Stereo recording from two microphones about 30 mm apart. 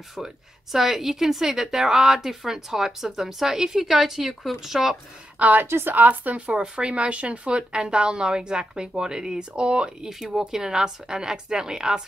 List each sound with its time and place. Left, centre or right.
0.1 s a woman's voice: centre
5.4 s speech: right
6.5 s speech: right
10.0 s a woman's voice: centre